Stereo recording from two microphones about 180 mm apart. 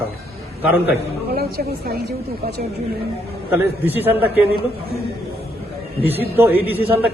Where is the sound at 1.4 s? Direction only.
60° right (ahead or behind).